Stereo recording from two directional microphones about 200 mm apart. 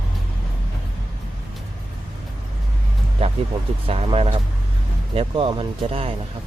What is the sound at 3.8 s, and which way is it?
Speech, 30° right (ahead or behind).